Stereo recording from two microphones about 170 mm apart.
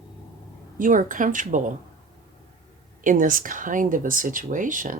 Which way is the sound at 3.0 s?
50° right (ahead or behind).